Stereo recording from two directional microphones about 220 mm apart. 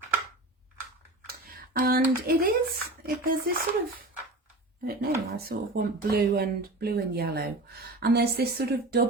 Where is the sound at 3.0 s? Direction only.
40° right (ahead or behind).